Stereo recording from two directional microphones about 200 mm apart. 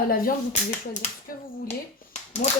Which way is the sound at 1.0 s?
40° left (ahead or behind).